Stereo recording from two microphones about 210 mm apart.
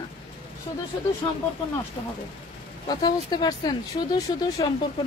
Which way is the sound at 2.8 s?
20° left (ahead or behind).